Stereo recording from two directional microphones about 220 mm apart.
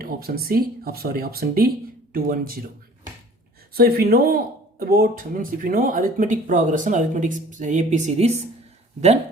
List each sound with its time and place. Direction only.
0.0 s speech: 45° right (ahead or behind)
3.8 s speech: 45° right (ahead or behind); by 8.4 s 30° right (ahead or behind)